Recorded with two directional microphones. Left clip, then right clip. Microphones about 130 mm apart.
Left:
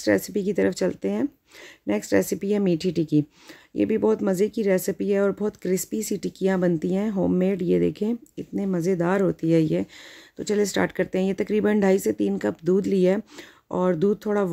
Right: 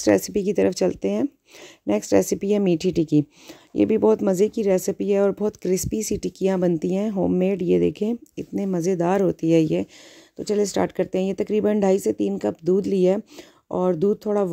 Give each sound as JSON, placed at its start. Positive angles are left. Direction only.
{"t": 0.0, "sound": "speech", "side_deg": -50}
{"t": 10.3, "sound": "speech", "side_deg": -30}